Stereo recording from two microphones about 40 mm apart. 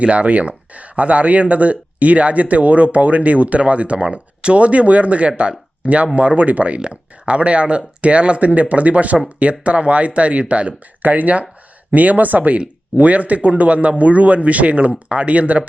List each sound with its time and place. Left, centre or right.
0.0 s speech: right